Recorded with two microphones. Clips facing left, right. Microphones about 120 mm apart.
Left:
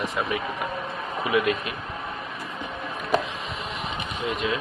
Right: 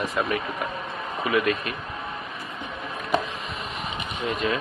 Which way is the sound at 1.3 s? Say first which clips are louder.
Even; 15° left (ahead or behind).